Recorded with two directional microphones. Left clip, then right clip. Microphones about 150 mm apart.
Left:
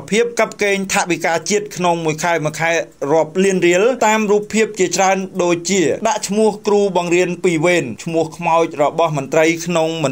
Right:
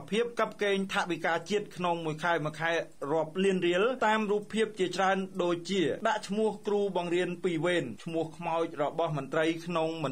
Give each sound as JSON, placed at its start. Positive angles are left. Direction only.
{"t": 0.1, "sound": "speech", "side_deg": 25}